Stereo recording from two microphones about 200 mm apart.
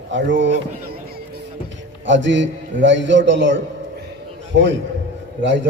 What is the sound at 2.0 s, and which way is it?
A man's voice, 65° right (ahead or behind).